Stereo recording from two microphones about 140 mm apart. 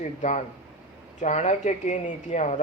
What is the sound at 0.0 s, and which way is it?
Speech, 60° left (ahead or behind).